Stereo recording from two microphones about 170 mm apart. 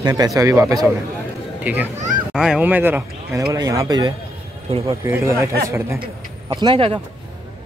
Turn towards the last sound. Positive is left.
turn(degrees=-30)  # may be behind; listen again after turning